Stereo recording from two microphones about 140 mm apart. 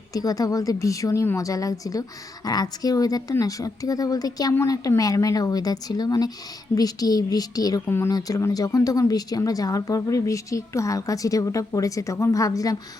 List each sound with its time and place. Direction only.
0.1 s speech: 25° left (ahead or behind)